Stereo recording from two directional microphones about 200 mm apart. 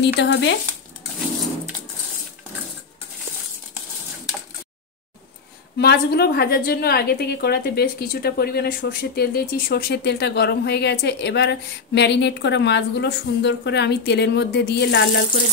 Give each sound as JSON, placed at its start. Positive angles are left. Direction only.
{"t": 0.0, "sound": "a woman's voice", "side_deg": 60}
{"t": 5.8, "sound": "a woman's voice", "side_deg": 55}